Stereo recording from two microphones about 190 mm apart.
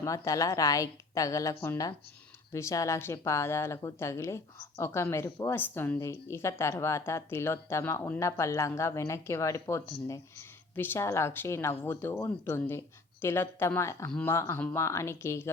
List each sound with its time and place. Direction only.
0.0 s speech: 15° left (ahead or behind)